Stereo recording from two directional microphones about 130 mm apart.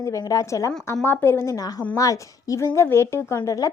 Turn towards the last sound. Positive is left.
turn(degrees=25)  # may be behind; listen again after turning